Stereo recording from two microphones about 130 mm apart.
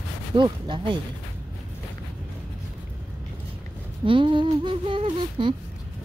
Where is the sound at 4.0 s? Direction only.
40° right (ahead or behind).